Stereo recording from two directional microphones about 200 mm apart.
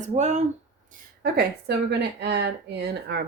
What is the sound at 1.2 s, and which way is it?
Speech, 50° right (ahead or behind).